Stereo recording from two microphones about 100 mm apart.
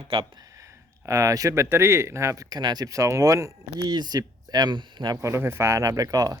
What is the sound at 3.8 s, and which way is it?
Speech, 45° right (ahead or behind).